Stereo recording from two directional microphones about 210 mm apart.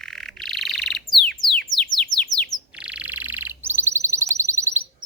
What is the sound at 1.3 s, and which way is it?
Music, centre (ahead or behind).